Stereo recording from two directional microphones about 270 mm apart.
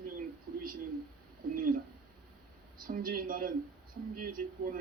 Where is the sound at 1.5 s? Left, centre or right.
Right.